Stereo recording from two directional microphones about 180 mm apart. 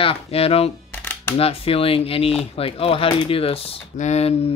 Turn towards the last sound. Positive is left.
turn(degrees=40)  # may be behind; listen again after turning